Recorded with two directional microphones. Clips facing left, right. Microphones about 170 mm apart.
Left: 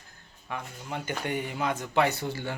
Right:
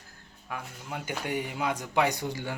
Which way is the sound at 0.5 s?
5° right (ahead or behind).